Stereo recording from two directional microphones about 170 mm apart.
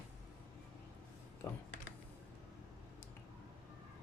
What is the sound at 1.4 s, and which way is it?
Speech, 15° left (ahead or behind).